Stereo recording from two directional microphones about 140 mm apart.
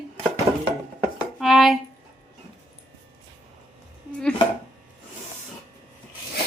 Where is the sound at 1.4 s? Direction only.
Centre (ahead or behind).